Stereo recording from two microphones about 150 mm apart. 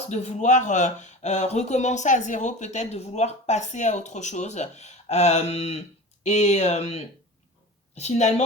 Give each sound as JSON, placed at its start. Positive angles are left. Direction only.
{"t": 0.1, "sound": "speech", "side_deg": 50}